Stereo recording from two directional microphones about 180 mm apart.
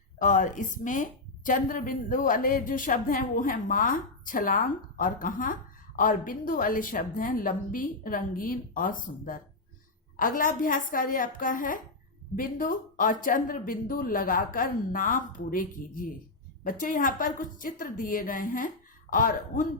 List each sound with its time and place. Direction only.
0.2 s a woman's voice: 45° left (ahead or behind)